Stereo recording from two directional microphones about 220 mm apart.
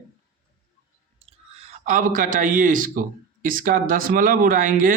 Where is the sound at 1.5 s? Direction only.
30° right (ahead or behind).